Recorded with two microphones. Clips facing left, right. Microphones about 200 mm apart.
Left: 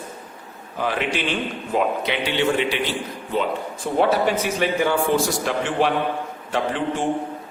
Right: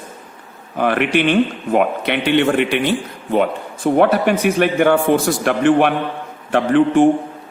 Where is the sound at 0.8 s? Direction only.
60° right (ahead or behind).